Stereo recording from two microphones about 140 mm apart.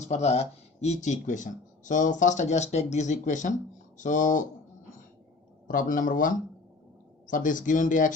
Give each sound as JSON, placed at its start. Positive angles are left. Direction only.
{"t": 0.0, "sound": "speech", "side_deg": 55}
{"t": 5.6, "sound": "speech", "side_deg": 75}